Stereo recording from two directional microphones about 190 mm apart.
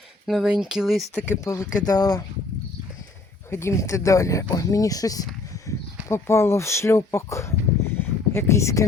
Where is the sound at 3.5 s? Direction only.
15° left (ahead or behind).